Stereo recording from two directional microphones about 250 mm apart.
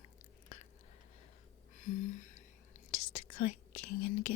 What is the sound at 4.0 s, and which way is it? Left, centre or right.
Speech, left.